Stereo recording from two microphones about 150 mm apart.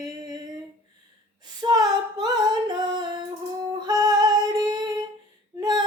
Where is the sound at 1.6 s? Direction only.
25° right (ahead or behind).